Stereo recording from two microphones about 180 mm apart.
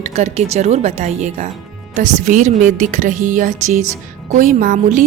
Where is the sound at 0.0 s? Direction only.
40° right (ahead or behind).